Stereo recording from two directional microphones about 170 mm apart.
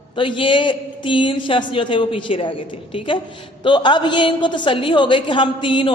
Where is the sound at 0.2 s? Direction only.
30° left (ahead or behind).